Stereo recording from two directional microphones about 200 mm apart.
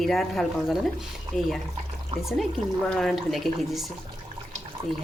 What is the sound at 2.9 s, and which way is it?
Speech, centre (ahead or behind).